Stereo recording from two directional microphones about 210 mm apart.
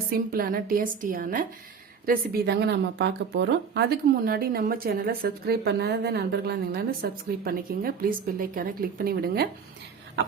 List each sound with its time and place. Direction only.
0.1 s a woman's voice: 45° right (ahead or behind)